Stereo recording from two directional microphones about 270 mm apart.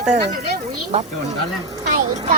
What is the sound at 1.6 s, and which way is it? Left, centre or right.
Speech, centre.